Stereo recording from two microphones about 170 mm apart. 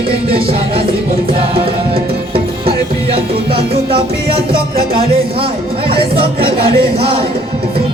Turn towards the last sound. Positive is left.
turn(degrees=-65)  # may be behind; listen again after turning